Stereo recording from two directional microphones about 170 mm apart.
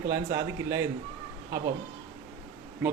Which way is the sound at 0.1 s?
15° right (ahead or behind).